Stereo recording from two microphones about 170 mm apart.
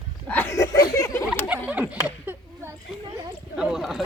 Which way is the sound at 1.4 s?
10° right (ahead or behind).